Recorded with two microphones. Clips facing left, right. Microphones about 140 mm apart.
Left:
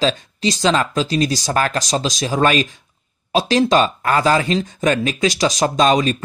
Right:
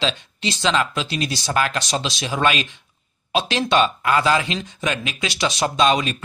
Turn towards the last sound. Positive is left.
turn(degrees=40)  # may be behind; listen again after turning